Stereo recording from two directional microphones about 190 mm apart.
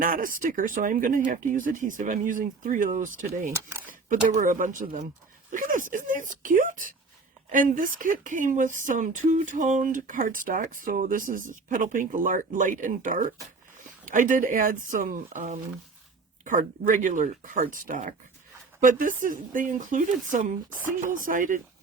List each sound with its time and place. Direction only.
0.0 s speech: 45° right (ahead or behind)
3.5 s speech: 15° right (ahead or behind)
3.8 s speech: 45° right (ahead or behind)